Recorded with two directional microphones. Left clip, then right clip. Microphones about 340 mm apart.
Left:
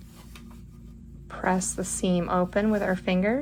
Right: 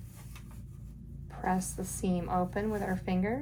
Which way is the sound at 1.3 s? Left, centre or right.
Centre.